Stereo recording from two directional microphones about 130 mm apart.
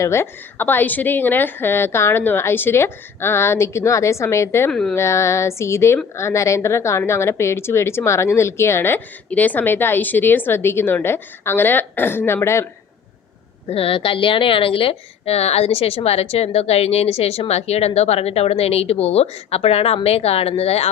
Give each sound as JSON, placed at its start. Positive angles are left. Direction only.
{"t": 0.0, "sound": "speech", "side_deg": 20}
{"t": 4.7, "sound": "speech", "side_deg": 5}
{"t": 4.9, "sound": "speech", "side_deg": 20}
{"t": 13.7, "sound": "a woman's voice", "side_deg": 45}